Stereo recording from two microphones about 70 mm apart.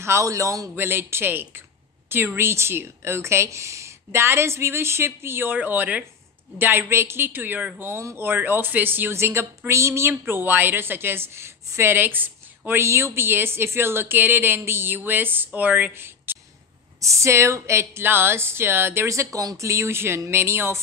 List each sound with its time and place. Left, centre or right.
0.0 s speech: right
0.7 s a woman's voice: right
12.8 s a woman's voice: right
17.0 s a woman's voice: right